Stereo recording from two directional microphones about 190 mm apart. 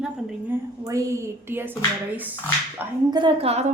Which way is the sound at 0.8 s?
15° right (ahead or behind).